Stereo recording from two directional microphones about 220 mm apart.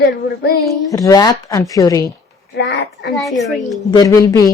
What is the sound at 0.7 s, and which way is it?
A woman's voice, 15° left (ahead or behind).